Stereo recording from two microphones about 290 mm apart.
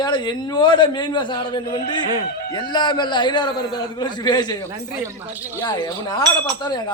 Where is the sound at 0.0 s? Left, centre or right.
Centre.